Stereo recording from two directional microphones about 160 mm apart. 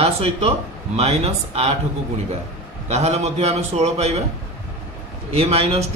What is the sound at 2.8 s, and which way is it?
Speech, 40° right (ahead or behind).